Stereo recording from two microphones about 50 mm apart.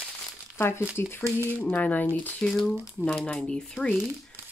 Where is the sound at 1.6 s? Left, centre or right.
Left; by 3.9 s centre.